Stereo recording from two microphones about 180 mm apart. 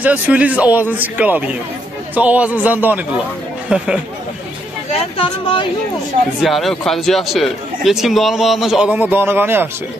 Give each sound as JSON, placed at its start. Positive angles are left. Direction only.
{"t": 0.0, "sound": "a man's voice", "side_deg": -10}
{"t": 5.1, "sound": "speech", "side_deg": 30}
{"t": 6.4, "sound": "speech", "side_deg": 0}